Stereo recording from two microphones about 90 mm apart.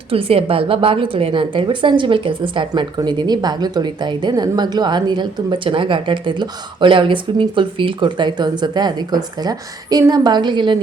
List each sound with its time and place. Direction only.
0.1 s a woman's voice: 90° right; by 10.8 s 60° right (ahead or behind)